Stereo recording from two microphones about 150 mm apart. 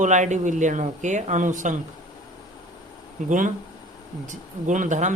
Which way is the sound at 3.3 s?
60° right (ahead or behind).